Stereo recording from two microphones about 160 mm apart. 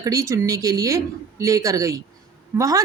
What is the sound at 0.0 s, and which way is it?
A woman's voice, 20° right (ahead or behind).